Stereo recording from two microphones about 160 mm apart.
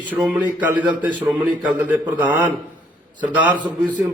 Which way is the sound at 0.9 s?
30° right (ahead or behind).